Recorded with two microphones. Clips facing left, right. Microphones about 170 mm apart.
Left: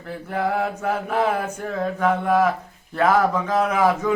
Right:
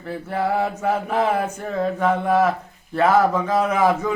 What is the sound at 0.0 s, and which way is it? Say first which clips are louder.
Mantra: right 1 dB; centre (ahead or behind).